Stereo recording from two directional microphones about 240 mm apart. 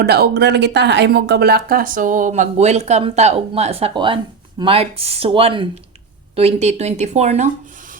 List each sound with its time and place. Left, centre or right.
0.0 s speech: right